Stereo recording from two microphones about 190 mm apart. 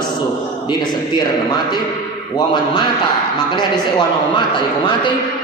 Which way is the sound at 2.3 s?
20° left (ahead or behind).